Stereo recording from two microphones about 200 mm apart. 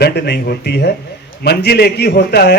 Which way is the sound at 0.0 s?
55° left (ahead or behind).